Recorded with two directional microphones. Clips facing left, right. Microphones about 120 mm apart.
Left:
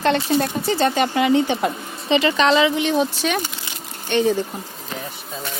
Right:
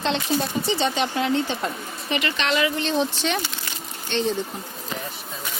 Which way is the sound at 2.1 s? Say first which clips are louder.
Left 8 dB; 90° left.